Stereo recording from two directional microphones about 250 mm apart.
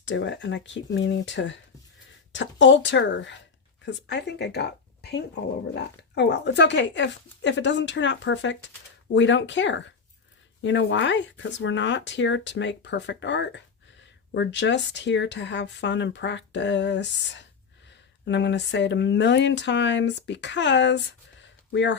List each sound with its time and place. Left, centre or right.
0.0 s speech: left